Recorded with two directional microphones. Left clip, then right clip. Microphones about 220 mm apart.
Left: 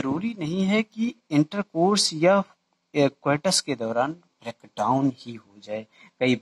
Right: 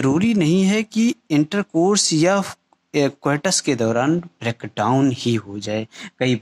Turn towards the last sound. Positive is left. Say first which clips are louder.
# right 2 dB
turn(degrees=-40)  # may be behind; listen again after turning